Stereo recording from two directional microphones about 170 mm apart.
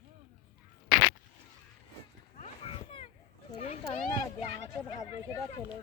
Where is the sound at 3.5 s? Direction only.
40° left (ahead or behind).